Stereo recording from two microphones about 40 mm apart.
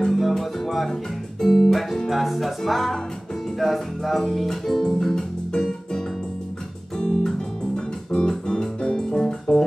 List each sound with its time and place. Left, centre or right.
0.0 s music: centre
1.4 s speech: centre
2.0 s music: centre